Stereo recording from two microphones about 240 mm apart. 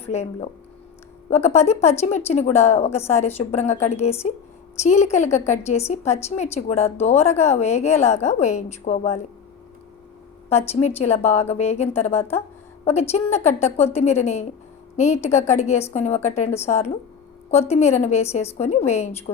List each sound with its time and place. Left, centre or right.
0.1 s a woman's voice: left
1.5 s a woman's voice: left
10.5 s a woman's voice: left